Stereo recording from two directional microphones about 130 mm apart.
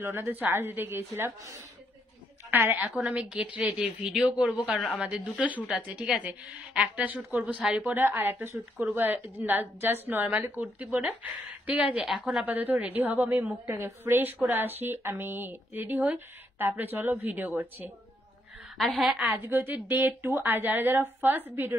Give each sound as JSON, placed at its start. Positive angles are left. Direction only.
{"t": 0.0, "sound": "a woman's voice", "side_deg": -15}
{"t": 12.4, "sound": "a woman's voice", "side_deg": -15}
{"t": 18.8, "sound": "a woman's voice", "side_deg": 0}
{"t": 19.2, "sound": "a woman's voice", "side_deg": -15}